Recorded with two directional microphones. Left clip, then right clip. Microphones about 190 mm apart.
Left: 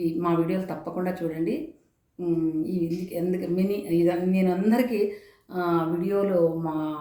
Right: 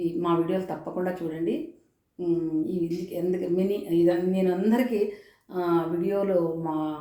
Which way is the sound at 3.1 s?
15° left (ahead or behind).